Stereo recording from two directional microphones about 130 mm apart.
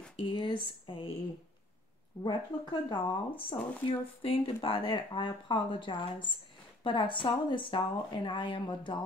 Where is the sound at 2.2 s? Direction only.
35° left (ahead or behind).